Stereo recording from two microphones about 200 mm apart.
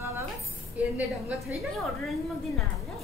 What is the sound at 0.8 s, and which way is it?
Speech, 5° right (ahead or behind).